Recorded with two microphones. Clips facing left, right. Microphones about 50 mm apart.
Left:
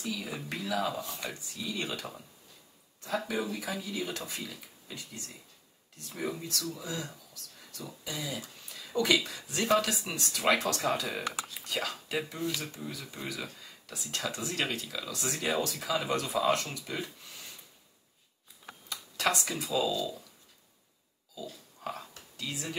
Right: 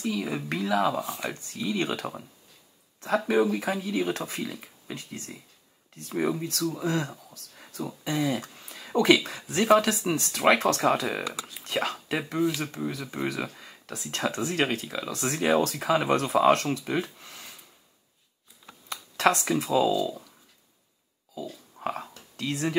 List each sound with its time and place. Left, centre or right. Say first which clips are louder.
0.0 s speech: right 7 dB; right
1.0 s speech: right 6 dB; right
1.3 s speech: right 7 dB; right
3.3 s speech: right 10 dB; right
15.1 s speech: right 8 dB; right
18.9 s computer keyboard: right 7 dB; right
19.6 s speech: right 6 dB; right
21.7 s a sound: right 7 dB; right
22.4 s speech: right 9 dB; right